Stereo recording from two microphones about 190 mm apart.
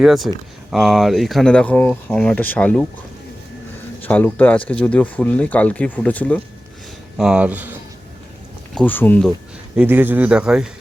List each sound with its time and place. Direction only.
0.0 s speech: centre (ahead or behind)
4.0 s speech: 10° left (ahead or behind)
7.2 s speech: 5° right (ahead or behind)
8.7 s speech: 10° left (ahead or behind)
9.7 s speech: 10° right (ahead or behind)